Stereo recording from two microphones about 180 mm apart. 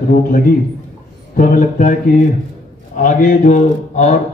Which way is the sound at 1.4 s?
50° left (ahead or behind).